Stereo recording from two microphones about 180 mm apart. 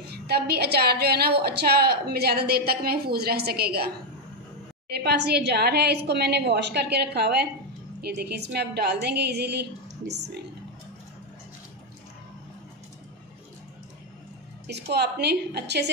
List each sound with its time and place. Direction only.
0.1 s a woman's voice: 60° right (ahead or behind)
14.7 s a woman's voice: 65° right (ahead or behind)